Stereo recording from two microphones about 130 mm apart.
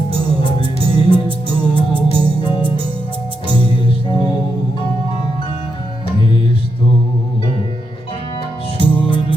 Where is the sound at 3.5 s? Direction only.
40° right (ahead or behind).